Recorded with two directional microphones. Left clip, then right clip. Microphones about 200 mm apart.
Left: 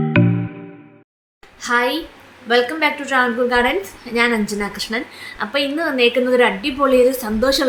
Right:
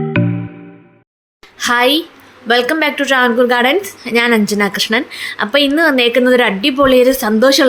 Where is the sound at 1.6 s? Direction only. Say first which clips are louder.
Right 6 dB; 40° right (ahead or behind).